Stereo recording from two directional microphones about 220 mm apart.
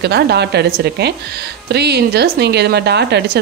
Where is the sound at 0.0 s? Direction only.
50° right (ahead or behind).